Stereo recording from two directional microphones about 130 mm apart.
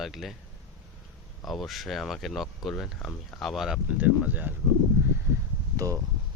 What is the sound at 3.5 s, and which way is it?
Speech, 5° right (ahead or behind).